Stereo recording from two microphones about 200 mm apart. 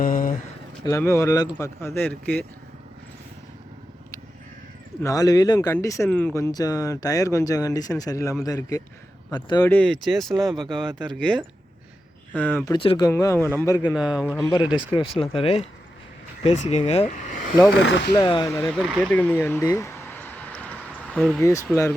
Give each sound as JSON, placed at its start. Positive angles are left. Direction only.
{"t": 0.0, "sound": "a sound", "side_deg": 45}
{"t": 0.9, "sound": "speech", "side_deg": 15}
{"t": 5.0, "sound": "speech", "side_deg": 20}
{"t": 9.6, "sound": "speech", "side_deg": 5}
{"t": 12.7, "sound": "speech", "side_deg": 25}
{"t": 13.9, "sound": "speech", "side_deg": -5}
{"t": 14.3, "sound": "speech", "side_deg": 20}
{"t": 17.7, "sound": "speech", "side_deg": 65}
{"t": 18.2, "sound": "speech", "side_deg": 20}
{"t": 18.5, "sound": "a sound", "side_deg": 10}